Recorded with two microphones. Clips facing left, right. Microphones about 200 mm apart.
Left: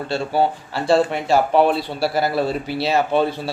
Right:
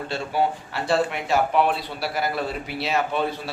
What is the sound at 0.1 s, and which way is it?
Speech, 30° left (ahead or behind).